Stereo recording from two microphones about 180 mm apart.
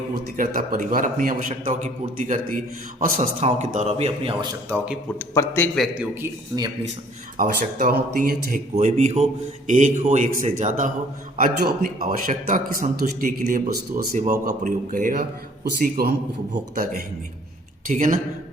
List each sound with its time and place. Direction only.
0.3 s a man's voice: 50° right (ahead or behind); by 4.4 s 30° right (ahead or behind)
5.2 s speech: 15° left (ahead or behind)
5.7 s speech: 5° right (ahead or behind)
7.3 s a man's voice: 50° right (ahead or behind)
8.7 s a man's voice: 40° right (ahead or behind); by 16.1 s 60° right (ahead or behind)
17.8 s a man's voice: 50° right (ahead or behind)